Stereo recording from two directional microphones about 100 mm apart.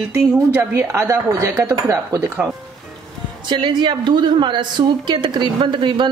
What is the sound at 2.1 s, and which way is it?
Speech, 15° right (ahead or behind).